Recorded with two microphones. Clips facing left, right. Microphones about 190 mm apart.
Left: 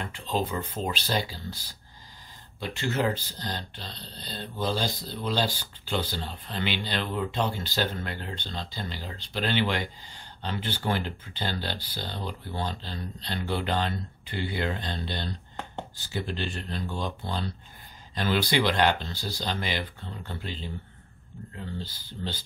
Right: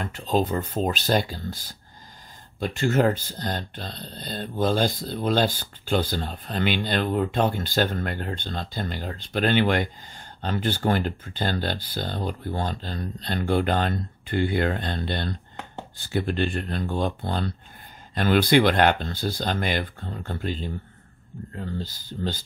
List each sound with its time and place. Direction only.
0.0 s speech: 45° right (ahead or behind)